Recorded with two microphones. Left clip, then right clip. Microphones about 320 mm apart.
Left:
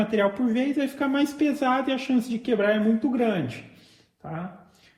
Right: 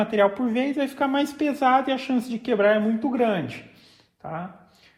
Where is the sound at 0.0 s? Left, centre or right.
Centre.